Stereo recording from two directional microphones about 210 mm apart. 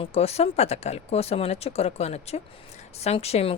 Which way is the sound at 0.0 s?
30° left (ahead or behind).